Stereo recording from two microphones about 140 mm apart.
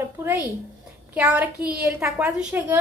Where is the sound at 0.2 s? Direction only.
15° right (ahead or behind).